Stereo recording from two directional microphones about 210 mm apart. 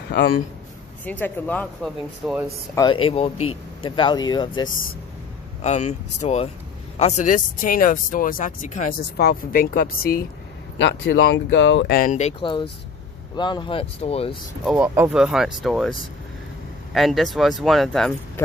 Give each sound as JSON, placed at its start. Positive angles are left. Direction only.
{"t": 0.1, "sound": "a man's voice", "side_deg": 55}
{"t": 1.0, "sound": "speech", "side_deg": 10}
{"t": 2.7, "sound": "speech", "side_deg": 20}
{"t": 5.6, "sound": "speech", "side_deg": 35}
{"t": 10.8, "sound": "speech", "side_deg": 60}
{"t": 12.0, "sound": "speech", "side_deg": 35}
{"t": 14.6, "sound": "speech", "side_deg": 0}
{"t": 16.9, "sound": "speech", "side_deg": 0}